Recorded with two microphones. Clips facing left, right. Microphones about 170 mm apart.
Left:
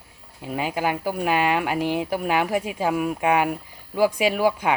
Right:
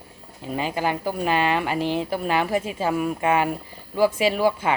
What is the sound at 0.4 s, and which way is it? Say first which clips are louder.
Speech: even; 10° left (ahead or behind).